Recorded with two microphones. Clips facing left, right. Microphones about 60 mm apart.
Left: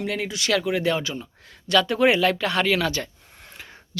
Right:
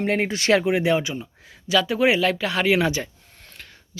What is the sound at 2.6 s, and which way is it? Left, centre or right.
Speech, centre.